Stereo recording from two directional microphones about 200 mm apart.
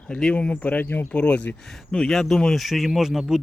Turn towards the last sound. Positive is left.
turn(degrees=0)  # may be behind; listen again after turning